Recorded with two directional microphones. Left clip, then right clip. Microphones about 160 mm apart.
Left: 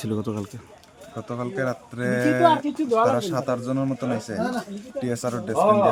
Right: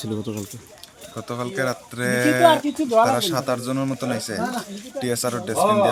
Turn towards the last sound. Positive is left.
turn(degrees=5)  # may be behind; listen again after turning